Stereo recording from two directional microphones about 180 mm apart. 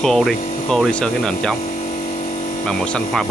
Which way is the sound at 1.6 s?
40° left (ahead or behind).